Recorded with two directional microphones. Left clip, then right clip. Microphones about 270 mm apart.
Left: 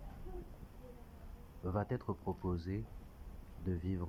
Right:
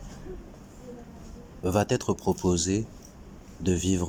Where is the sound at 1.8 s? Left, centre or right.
Right.